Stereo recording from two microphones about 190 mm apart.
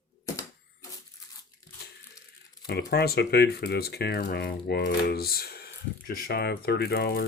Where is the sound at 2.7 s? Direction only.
60° left (ahead or behind).